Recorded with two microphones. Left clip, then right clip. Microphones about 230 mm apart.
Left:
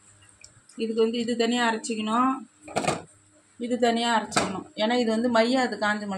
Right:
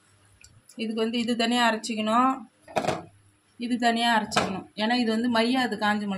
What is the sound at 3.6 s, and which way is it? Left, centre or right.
Speech, right.